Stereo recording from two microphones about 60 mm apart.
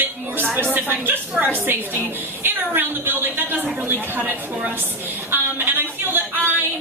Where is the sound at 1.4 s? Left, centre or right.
Right.